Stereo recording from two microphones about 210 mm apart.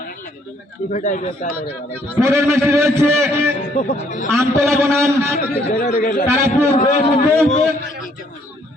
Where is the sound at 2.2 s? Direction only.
15° right (ahead or behind).